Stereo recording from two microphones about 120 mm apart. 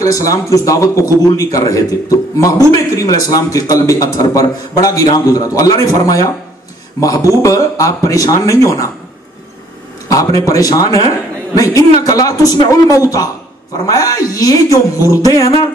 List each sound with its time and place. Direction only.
0.0 s a man's voice: 30° left (ahead or behind)
7.4 s a man's voice: 30° left (ahead or behind)
10.1 s a man's voice: 25° left (ahead or behind)